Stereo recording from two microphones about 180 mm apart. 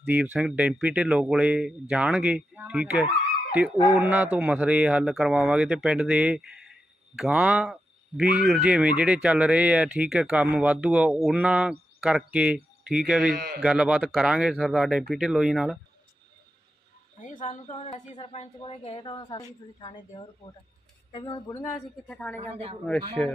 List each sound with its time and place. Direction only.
0.0 s speech: 10° right (ahead or behind)
13.3 s a man's voice: 60° right (ahead or behind)
13.7 s speech: 5° right (ahead or behind)
17.4 s a woman's voice: 40° left (ahead or behind); by 21.7 s 20° left (ahead or behind)
22.0 s a woman's voice: 5° left (ahead or behind)
22.4 s speech: 35° right (ahead or behind)